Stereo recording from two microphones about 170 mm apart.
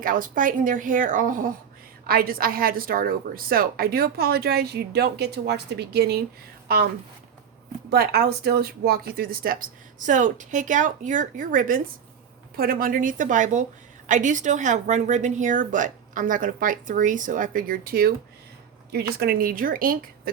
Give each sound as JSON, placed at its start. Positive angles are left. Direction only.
{"t": 0.0, "sound": "a woman's voice", "side_deg": -55}
{"t": 7.9, "sound": "speech", "side_deg": -70}